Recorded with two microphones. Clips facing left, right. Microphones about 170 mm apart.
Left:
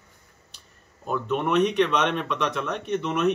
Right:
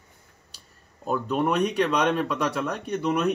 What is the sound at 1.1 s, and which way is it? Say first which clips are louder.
A man's voice: even; 40° right (ahead or behind).